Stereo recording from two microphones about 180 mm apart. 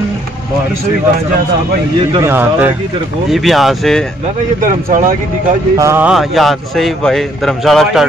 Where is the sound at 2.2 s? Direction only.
10° right (ahead or behind).